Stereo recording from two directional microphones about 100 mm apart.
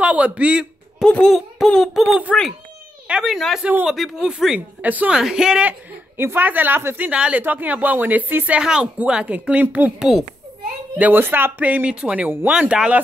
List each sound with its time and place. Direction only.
0.0 s a sound: 15° right (ahead or behind)
1.0 s speech: 10° left (ahead or behind); by 5.8 s 10° right (ahead or behind)
6.1 s speech: 20° right (ahead or behind)